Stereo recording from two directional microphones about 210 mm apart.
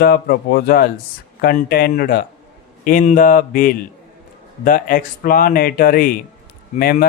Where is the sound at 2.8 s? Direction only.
40° left (ahead or behind).